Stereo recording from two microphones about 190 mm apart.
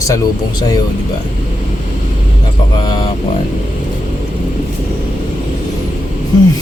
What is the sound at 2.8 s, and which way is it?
Speech, 20° left (ahead or behind).